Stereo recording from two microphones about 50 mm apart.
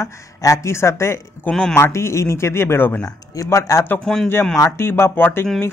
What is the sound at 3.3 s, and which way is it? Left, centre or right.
Speech, left.